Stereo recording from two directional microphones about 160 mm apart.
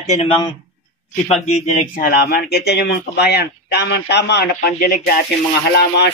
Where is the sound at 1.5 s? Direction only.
45° left (ahead or behind); by 4.7 s 90° left.